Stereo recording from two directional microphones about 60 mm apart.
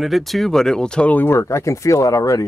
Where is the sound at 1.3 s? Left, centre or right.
Left.